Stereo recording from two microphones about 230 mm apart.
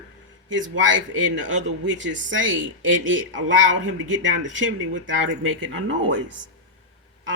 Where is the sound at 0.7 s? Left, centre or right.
Right.